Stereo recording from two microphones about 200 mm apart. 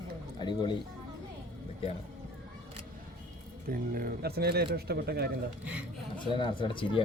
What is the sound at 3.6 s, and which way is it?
Speech, 45° right (ahead or behind).